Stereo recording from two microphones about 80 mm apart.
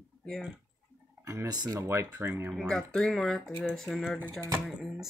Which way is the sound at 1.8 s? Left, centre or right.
Right.